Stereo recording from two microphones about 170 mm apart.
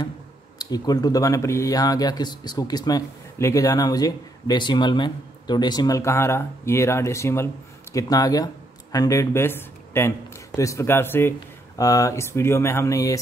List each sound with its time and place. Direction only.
0.6 s speech: 25° left (ahead or behind)